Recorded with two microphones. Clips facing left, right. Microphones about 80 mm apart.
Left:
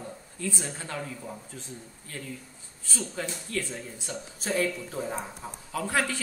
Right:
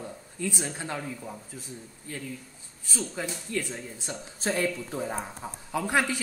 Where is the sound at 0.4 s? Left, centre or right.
Centre.